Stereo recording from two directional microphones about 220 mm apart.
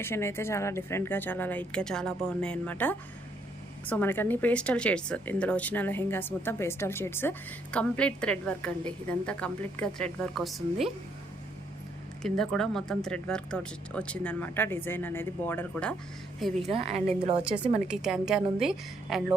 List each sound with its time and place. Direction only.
0.0 s speech: 10° left (ahead or behind)
12.2 s speech: centre (ahead or behind)
16.6 s a woman's voice: 30° right (ahead or behind)
17.8 s speech: centre (ahead or behind)